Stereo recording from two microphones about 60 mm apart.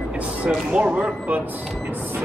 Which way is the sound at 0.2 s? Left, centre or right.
Right.